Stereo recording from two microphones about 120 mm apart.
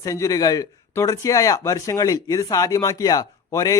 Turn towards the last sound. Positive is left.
turn(degrees=30)  # may be behind; listen again after turning